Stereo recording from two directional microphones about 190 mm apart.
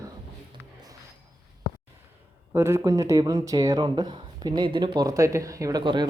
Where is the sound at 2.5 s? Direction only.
15° right (ahead or behind).